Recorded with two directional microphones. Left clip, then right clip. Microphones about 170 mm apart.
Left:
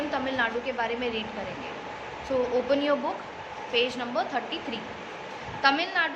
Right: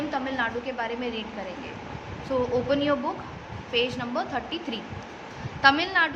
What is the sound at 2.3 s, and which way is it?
A woman's voice, 15° right (ahead or behind).